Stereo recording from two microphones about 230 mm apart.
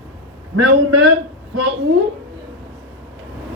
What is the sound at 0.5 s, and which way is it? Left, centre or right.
Speech, right.